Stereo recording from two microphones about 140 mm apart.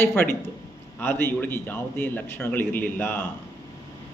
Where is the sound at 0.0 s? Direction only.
15° left (ahead or behind).